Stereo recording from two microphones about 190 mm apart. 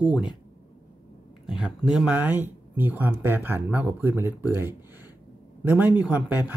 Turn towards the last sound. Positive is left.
turn(degrees=-10)  # may be behind; listen again after turning